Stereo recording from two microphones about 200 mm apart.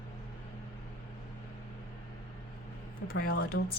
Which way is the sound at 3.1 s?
50° left (ahead or behind).